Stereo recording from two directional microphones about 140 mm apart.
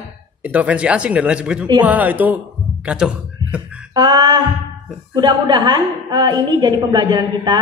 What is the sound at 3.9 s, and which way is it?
A woman's voice, 30° right (ahead or behind).